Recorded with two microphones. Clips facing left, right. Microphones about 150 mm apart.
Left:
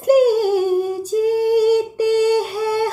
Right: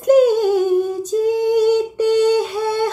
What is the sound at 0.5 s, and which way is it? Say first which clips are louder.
Female singing: right 1 dB; 5° left (ahead or behind).